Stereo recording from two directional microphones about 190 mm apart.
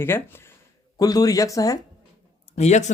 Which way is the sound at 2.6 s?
35° left (ahead or behind).